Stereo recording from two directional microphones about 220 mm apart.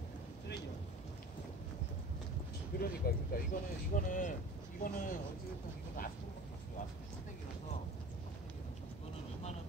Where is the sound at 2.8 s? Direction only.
45° left (ahead or behind).